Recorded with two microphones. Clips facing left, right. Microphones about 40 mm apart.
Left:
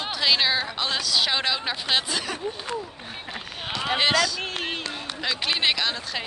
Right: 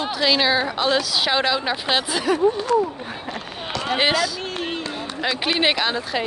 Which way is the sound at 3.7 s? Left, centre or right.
Centre.